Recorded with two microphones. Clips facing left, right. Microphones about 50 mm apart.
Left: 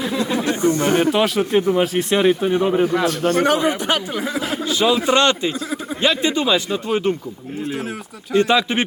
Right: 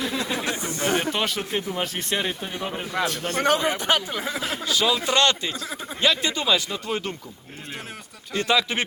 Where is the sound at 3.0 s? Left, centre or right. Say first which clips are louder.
Left 9 dB; centre.